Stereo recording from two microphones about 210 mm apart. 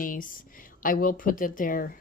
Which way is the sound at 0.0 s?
40° left (ahead or behind).